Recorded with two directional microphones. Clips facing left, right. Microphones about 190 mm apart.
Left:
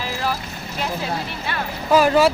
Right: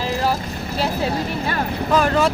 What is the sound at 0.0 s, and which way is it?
Vehicle, 35° right (ahead or behind).